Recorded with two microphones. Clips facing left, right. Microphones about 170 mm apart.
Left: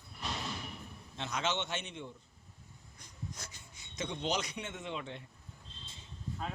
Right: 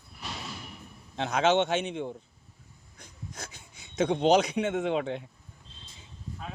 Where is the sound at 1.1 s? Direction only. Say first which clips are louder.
Right 12 dB; 75° right (ahead or behind).